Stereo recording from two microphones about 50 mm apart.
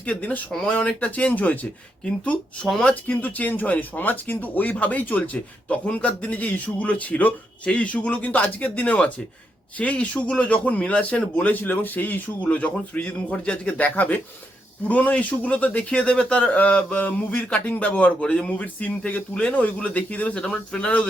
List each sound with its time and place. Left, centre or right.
0.0 s speech: left
16.5 s speech: left
19.5 s speech: left
20.3 s speech: centre